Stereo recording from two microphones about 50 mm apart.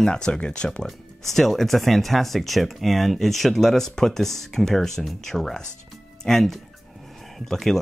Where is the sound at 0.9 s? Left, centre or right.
Centre.